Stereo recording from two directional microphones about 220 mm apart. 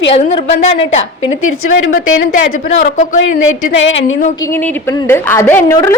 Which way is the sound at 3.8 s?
60° left (ahead or behind).